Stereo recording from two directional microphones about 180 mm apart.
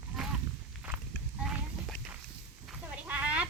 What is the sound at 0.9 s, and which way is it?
Walk, 5° right (ahead or behind).